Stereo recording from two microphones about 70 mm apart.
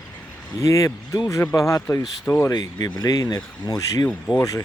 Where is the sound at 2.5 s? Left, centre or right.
Left.